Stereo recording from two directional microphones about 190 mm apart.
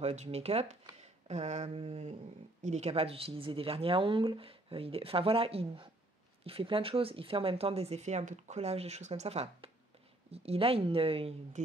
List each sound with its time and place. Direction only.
0.0 s speech: 35° right (ahead or behind)